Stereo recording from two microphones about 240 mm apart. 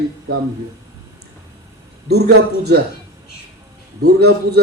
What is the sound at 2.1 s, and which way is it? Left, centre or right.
Speech, right.